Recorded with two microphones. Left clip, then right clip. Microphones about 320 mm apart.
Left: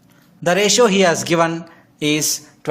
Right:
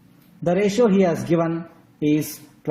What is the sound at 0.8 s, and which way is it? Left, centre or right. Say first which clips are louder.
Speech: left 5 dB; left.